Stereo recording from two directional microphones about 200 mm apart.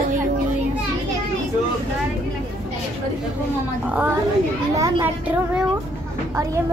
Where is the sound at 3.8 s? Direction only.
5° right (ahead or behind).